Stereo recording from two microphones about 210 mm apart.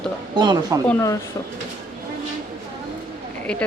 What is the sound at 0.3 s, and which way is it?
Speech, 20° right (ahead or behind).